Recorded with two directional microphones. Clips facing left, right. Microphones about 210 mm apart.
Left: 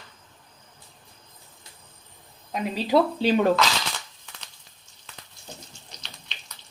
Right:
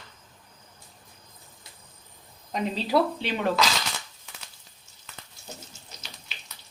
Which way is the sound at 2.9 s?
20° left (ahead or behind).